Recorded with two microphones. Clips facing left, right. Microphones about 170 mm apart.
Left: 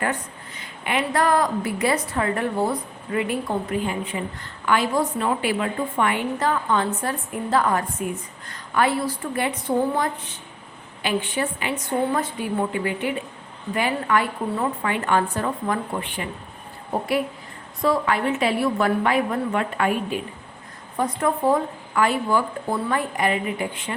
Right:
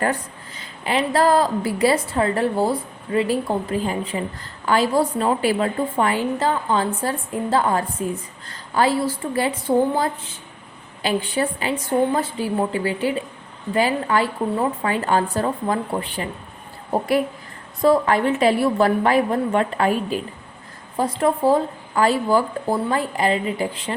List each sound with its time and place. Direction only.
0.0 s a woman's voice: 35° right (ahead or behind)
17.8 s a woman's voice: 35° right (ahead or behind)